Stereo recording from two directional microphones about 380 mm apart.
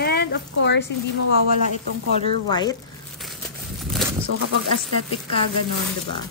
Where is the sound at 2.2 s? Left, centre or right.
Centre.